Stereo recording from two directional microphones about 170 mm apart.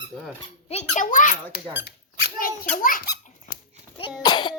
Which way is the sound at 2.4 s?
55° left (ahead or behind).